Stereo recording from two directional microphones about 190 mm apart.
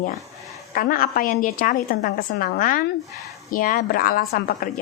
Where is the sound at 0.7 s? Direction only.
50° left (ahead or behind).